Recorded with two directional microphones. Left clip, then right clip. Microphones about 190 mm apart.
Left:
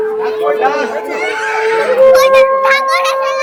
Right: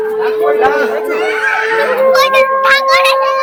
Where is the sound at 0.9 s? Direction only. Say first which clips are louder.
Right 3 dB; 20° right (ahead or behind).